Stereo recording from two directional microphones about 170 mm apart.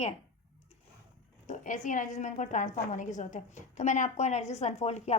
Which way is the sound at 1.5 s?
45° left (ahead or behind).